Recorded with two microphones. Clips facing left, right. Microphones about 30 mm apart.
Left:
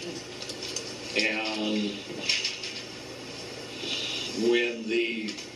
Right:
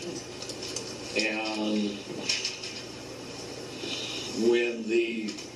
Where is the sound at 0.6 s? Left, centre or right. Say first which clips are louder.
Left 1 dB; left.